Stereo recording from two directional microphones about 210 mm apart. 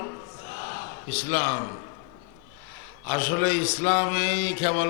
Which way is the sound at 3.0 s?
15° left (ahead or behind).